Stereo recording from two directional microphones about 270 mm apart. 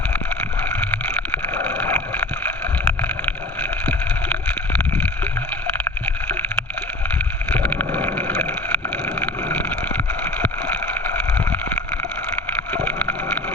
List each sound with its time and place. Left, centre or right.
1.3 s boat: centre
3.0 s vehicle: centre
7.6 s boat: centre
12.7 s boat: centre